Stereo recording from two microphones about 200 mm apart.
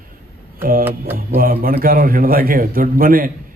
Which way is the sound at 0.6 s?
45° right (ahead or behind).